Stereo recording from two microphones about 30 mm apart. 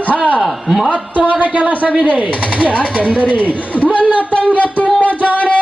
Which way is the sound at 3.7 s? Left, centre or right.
Left.